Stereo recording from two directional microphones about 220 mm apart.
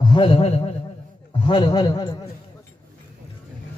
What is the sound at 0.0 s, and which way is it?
A man's voice, 25° left (ahead or behind).